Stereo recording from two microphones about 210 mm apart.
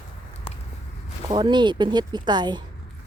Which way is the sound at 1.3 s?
20° right (ahead or behind).